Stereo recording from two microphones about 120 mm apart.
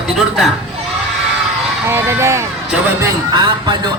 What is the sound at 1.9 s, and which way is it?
Speech, 20° right (ahead or behind).